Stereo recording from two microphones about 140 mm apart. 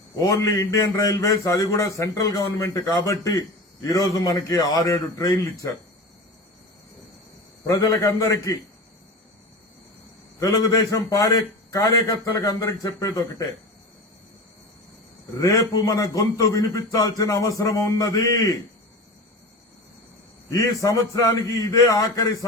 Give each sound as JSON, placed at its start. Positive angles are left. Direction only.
{"t": 0.3, "sound": "a man's voice", "side_deg": 20}
{"t": 7.7, "sound": "a man's voice", "side_deg": 25}
{"t": 10.4, "sound": "a man's voice", "side_deg": 25}
{"t": 15.4, "sound": "a man's voice", "side_deg": 25}
{"t": 20.5, "sound": "a man's voice", "side_deg": 25}